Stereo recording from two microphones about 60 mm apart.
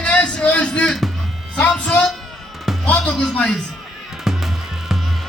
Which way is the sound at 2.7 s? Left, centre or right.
Centre.